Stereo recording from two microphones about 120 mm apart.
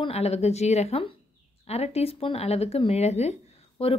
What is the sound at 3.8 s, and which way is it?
Speech, 55° left (ahead or behind).